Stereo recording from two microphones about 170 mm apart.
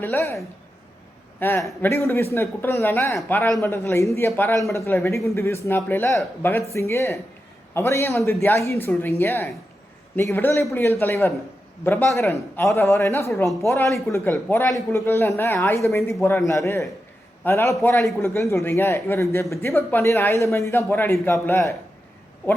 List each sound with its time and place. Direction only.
0.0 s a man's voice: 10° left (ahead or behind)
1.4 s a man's voice: 10° left (ahead or behind)